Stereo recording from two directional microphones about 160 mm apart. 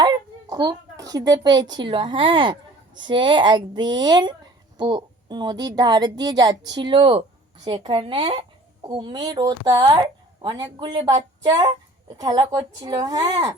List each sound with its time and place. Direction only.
0.0 s a child's voice: 25° right (ahead or behind)